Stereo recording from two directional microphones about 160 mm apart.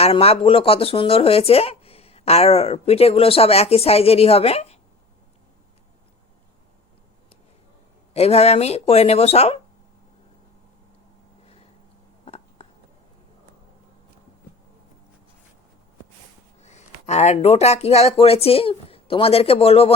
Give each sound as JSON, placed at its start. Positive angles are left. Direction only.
{"t": 0.0, "sound": "speech", "side_deg": 40}
{"t": 8.1, "sound": "speech", "side_deg": 40}
{"t": 12.2, "sound": "a sound", "side_deg": 40}
{"t": 16.6, "sound": "speech", "side_deg": 45}